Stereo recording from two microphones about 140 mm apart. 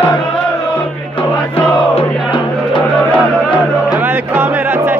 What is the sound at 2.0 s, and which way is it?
Music, 35° left (ahead or behind).